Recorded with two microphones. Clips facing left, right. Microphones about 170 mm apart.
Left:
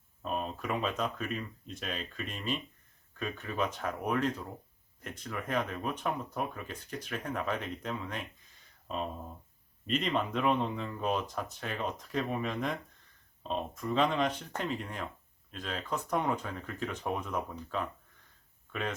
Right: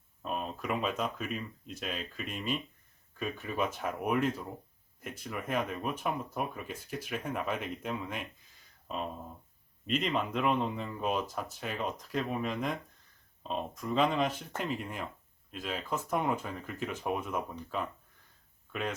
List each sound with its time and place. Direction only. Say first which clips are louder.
0.2 s speech: left 1 dB; centre (ahead or behind)
9.8 s speech: even; centre (ahead or behind)